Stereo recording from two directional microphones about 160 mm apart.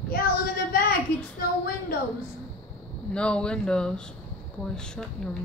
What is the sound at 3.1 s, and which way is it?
A woman's voice, 5° left (ahead or behind).